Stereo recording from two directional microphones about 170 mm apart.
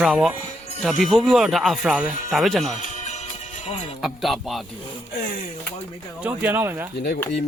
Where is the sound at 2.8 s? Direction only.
45° left (ahead or behind).